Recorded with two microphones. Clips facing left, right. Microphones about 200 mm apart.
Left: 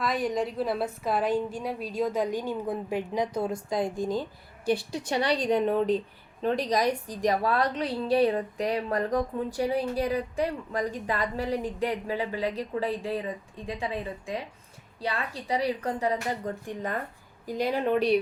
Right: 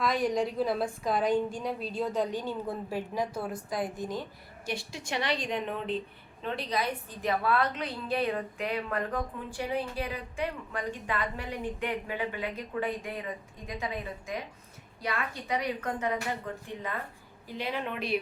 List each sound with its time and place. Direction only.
0.0 s a woman's voice: centre (ahead or behind); by 18.2 s 35° left (ahead or behind)